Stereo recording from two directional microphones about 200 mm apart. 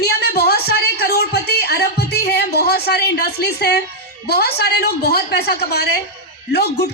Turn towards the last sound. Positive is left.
turn(degrees=55)  # may be behind; listen again after turning